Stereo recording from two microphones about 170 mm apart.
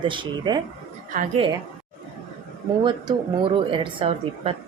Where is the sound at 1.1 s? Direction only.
55° right (ahead or behind).